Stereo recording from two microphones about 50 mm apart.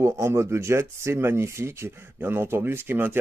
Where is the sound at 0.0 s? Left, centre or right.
Right.